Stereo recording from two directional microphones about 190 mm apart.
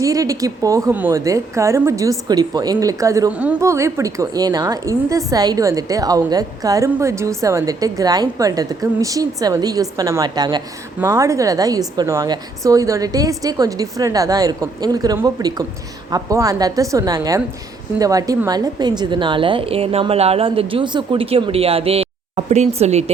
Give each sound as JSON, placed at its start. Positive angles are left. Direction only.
{"t": 0.0, "sound": "a woman's voice", "side_deg": -15}